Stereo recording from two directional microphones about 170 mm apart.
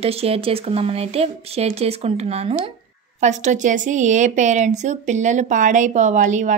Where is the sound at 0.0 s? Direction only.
35° right (ahead or behind).